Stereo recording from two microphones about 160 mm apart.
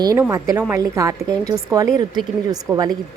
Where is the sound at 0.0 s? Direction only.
20° right (ahead or behind).